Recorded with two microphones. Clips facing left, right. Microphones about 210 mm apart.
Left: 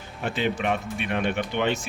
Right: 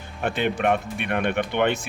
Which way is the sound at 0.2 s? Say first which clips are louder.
Right 3 dB; 55° right (ahead or behind).